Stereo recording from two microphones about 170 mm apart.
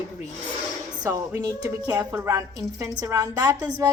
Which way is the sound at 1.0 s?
20° right (ahead or behind).